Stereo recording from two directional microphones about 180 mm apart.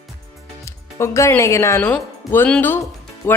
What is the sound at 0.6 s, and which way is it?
A woman's voice, 15° left (ahead or behind).